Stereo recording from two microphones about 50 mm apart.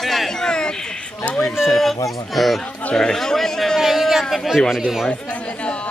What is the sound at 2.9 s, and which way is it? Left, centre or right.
Speech, centre.